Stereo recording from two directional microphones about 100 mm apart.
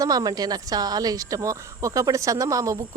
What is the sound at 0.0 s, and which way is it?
Speech, 40° right (ahead or behind).